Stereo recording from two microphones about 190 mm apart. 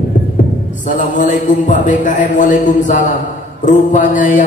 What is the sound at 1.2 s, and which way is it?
A man's voice, 40° left (ahead or behind).